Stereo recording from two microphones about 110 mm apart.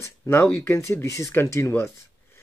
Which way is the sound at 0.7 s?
25° left (ahead or behind).